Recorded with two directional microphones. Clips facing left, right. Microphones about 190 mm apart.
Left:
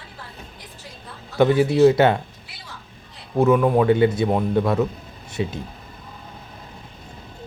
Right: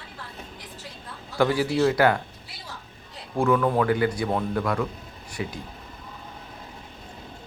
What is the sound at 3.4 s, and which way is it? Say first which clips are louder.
Speech: left 5 dB; 20° left (ahead or behind).